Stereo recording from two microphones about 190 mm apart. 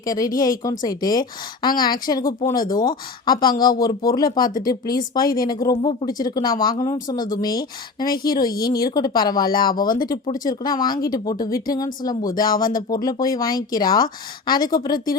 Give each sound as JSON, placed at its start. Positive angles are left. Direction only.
{"t": 0.0, "sound": "speech", "side_deg": 20}
{"t": 8.6, "sound": "speech", "side_deg": 20}